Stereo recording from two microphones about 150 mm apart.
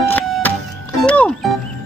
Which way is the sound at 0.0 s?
15° left (ahead or behind).